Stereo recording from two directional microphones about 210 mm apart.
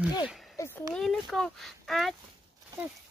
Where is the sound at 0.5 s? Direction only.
10° left (ahead or behind).